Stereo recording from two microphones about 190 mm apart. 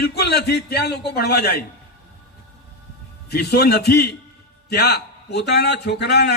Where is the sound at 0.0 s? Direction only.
60° left (ahead or behind).